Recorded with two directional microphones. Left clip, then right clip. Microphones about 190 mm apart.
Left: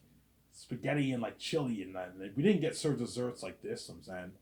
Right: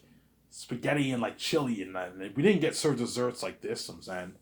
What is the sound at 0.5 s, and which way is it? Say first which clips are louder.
Speech: right 5 dB; 25° right (ahead or behind).